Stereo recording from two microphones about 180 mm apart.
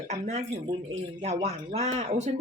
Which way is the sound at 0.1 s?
40° right (ahead or behind).